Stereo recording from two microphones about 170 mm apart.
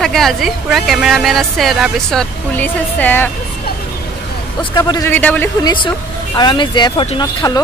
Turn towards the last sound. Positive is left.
turn(degrees=25)  # may be behind; listen again after turning